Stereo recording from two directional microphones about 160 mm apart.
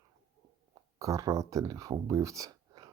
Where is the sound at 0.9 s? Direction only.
20° right (ahead or behind).